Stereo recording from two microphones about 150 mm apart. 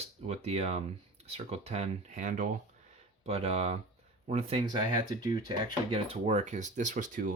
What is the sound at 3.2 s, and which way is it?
Speech, 40° right (ahead or behind).